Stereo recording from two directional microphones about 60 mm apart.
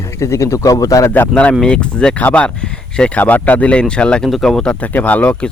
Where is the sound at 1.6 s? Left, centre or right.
Centre.